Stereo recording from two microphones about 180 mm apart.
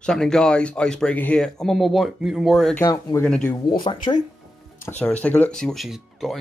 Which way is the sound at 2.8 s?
20° left (ahead or behind).